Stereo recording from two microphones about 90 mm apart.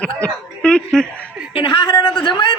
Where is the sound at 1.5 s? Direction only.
80° left.